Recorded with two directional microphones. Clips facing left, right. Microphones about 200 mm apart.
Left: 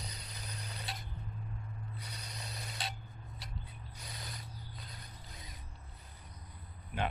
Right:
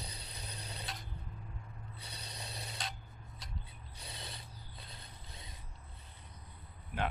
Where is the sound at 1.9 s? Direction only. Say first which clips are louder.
Left 2 dB; 30° right (ahead or behind).